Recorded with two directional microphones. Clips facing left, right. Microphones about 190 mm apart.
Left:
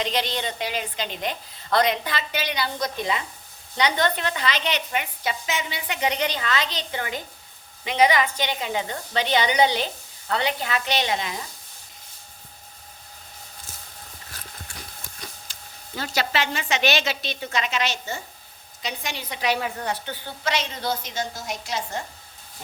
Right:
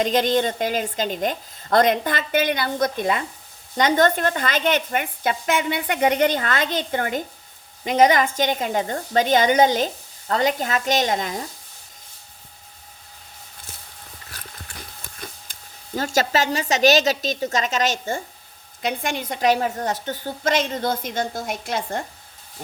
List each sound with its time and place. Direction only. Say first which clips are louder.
0.0 s a woman's voice: right 7 dB; 45° right (ahead or behind)
15.5 s a sound: even; 50° right (ahead or behind)
16.0 s a woman's voice: right 5 dB; 45° right (ahead or behind)